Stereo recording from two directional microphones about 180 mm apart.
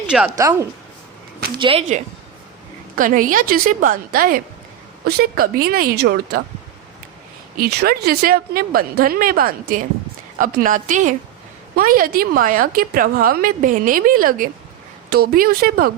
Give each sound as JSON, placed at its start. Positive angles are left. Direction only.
{"t": 0.3, "sound": "speech", "side_deg": -15}
{"t": 2.9, "sound": "a woman's voice", "side_deg": -50}
{"t": 7.5, "sound": "a woman's voice", "side_deg": -60}